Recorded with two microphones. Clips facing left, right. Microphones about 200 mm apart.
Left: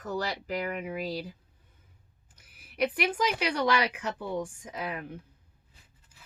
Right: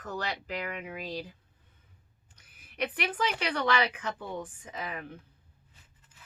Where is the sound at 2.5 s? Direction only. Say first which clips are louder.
Left 5 dB; 10° left (ahead or behind).